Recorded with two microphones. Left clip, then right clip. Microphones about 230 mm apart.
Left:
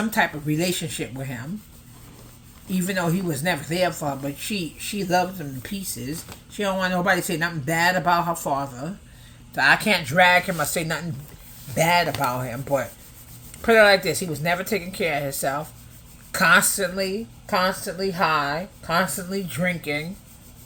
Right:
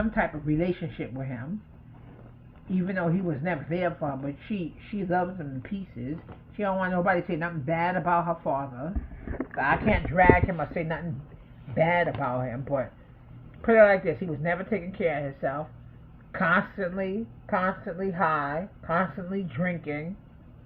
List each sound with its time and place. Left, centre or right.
0.1 s speech: left
2.7 s speech: left